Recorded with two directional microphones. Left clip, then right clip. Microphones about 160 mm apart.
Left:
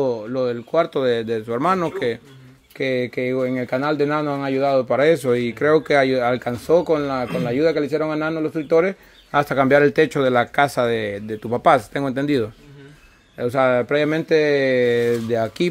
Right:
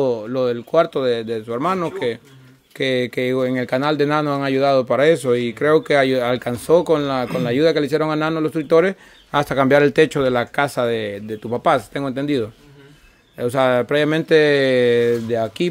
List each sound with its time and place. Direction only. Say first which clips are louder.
0.0 s speech: right 2 dB; 20° right (ahead or behind)
0.9 s speech: even; centre (ahead or behind)
2.8 s speech: right 2 dB; 20° right (ahead or behind)
9.3 s speech: right 1 dB; 15° right (ahead or behind)
13.4 s speech: right 1 dB; 15° right (ahead or behind)
15.2 s speech: even; 5° right (ahead or behind)